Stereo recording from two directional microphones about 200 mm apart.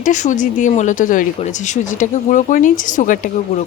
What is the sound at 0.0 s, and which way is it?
Speech, 40° left (ahead or behind).